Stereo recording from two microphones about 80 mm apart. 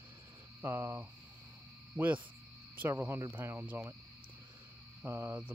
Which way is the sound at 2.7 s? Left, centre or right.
Right.